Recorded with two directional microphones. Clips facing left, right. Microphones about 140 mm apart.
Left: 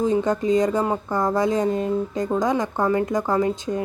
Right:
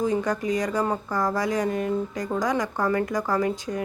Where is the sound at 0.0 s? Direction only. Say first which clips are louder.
Left 4 dB; 25° left (ahead or behind).